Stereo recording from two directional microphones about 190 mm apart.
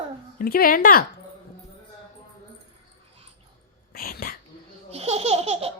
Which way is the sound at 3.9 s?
50° left (ahead or behind).